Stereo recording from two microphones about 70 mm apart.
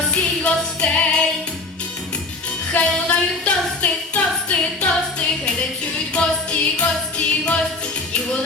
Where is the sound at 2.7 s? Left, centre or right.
Centre.